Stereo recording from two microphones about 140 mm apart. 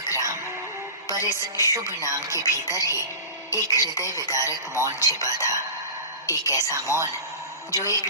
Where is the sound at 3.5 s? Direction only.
25° left (ahead or behind).